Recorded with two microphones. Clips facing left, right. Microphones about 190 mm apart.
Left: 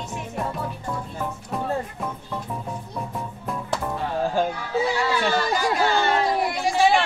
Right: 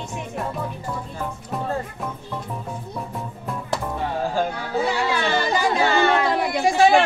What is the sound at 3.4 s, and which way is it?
Music, centre (ahead or behind).